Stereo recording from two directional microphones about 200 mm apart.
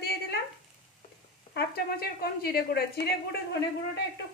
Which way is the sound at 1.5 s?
50° left (ahead or behind).